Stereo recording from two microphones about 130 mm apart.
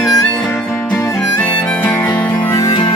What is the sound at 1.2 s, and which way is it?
Harmonica, 10° left (ahead or behind).